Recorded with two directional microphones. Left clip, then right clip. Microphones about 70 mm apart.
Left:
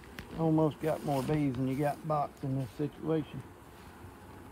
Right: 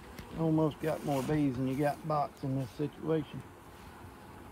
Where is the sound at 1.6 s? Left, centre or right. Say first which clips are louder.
Even; left.